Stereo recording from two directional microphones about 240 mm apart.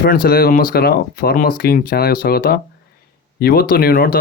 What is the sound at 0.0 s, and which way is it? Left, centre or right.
Speech, left.